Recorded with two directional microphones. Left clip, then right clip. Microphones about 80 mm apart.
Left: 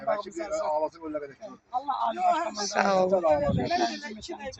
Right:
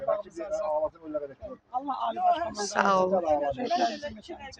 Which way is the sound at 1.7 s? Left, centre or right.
Right.